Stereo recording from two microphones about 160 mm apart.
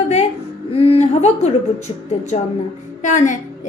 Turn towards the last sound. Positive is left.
turn(degrees=50)  # may be behind; listen again after turning